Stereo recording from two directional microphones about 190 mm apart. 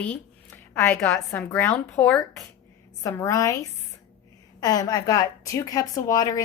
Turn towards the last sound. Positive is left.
turn(degrees=20)  # may be behind; listen again after turning